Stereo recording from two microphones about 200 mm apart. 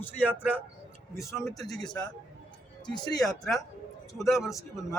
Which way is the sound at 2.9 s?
20° left (ahead or behind).